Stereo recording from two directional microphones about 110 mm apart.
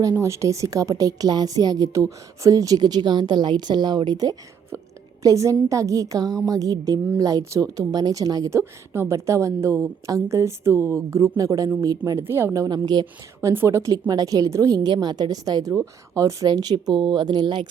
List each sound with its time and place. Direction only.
0.2 s a woman's voice: 25° right (ahead or behind)
12.2 s speech: 20° right (ahead or behind)
12.6 s a woman's voice: 40° right (ahead or behind)
13.4 s a woman's voice: 25° right (ahead or behind); by 17.7 s 45° right (ahead or behind)